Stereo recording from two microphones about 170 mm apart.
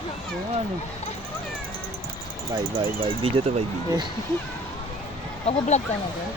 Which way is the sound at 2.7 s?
30° right (ahead or behind).